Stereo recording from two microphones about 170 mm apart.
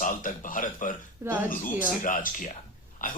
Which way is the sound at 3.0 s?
55° left (ahead or behind).